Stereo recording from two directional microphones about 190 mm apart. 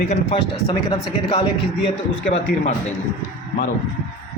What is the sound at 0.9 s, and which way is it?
Speech, 25° left (ahead or behind).